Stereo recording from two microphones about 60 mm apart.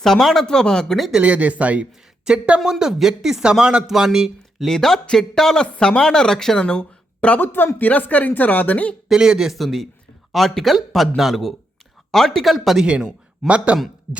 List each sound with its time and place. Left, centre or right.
0.0 s speech: centre
1.1 s speech: right; by 4.7 s centre
4.7 s speech: centre
7.3 s a woman's voice: left
9.0 s speech: centre
12.8 s speech: centre
13.4 s speech: centre
14.1 s speech: centre